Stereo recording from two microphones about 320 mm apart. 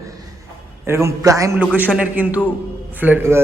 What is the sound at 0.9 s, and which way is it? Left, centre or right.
A man's voice, centre.